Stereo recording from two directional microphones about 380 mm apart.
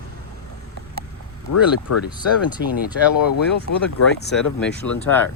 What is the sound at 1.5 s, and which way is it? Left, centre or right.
Speech, left.